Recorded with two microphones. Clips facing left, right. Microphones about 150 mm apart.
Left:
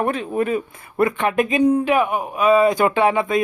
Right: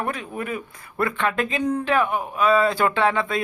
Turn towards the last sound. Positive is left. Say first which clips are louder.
# left 4 dB
turn(degrees=15)  # may be behind; listen again after turning